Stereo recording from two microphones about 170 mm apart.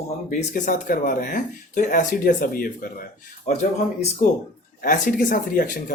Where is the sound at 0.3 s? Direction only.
50° left (ahead or behind).